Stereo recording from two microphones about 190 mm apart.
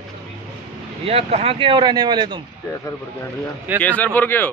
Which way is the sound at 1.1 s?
35° right (ahead or behind).